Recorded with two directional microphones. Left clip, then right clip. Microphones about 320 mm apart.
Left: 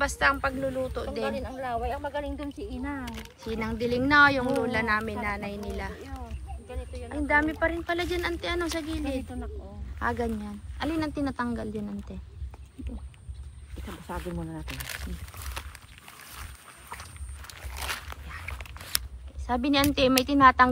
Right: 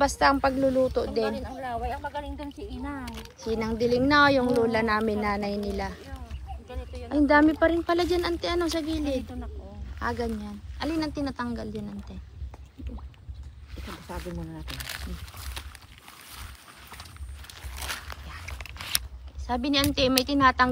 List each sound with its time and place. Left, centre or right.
0.0 s speech: centre
1.2 s speech: centre
7.0 s speech: centre
13.7 s speech: centre
17.7 s a sound: centre